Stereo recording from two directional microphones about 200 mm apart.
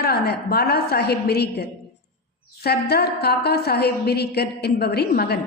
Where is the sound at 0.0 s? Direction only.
55° left (ahead or behind).